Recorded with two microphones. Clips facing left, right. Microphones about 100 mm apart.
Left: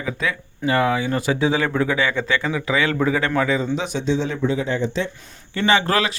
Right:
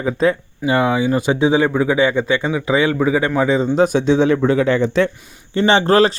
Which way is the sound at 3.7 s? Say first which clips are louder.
Right 8 dB; 50° right (ahead or behind).